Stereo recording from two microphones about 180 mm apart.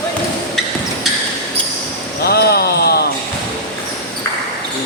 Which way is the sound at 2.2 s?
60° left (ahead or behind).